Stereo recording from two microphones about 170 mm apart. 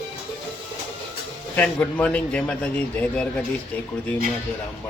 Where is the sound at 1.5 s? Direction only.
10° left (ahead or behind).